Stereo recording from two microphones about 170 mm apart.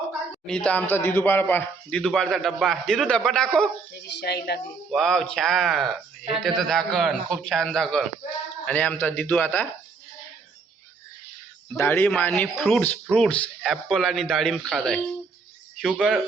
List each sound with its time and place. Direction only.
0.4 s speech: 5° left (ahead or behind)
4.1 s speech: 75° left (ahead or behind)
4.9 s a man's voice: centre (ahead or behind)
11.8 s a man's voice: 10° left (ahead or behind)